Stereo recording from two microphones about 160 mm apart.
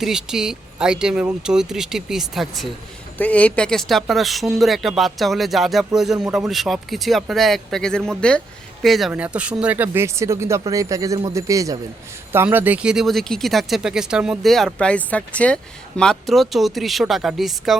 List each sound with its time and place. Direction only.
0.0 s speech: 5° right (ahead or behind)